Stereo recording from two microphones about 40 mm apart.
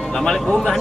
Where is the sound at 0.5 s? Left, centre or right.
Centre.